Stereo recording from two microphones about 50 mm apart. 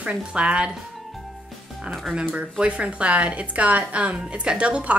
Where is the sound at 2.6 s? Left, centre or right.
Right.